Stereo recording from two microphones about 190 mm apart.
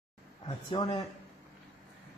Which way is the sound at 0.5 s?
25° left (ahead or behind).